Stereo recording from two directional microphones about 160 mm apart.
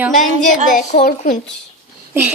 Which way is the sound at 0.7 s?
50° left (ahead or behind).